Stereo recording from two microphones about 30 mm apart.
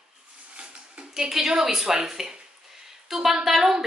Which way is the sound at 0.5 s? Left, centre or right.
Right.